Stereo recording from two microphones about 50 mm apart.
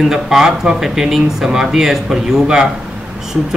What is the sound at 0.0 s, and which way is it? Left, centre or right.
Speech, centre.